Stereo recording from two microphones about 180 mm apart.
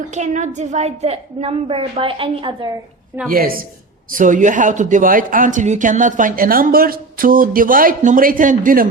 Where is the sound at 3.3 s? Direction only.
55° right (ahead or behind).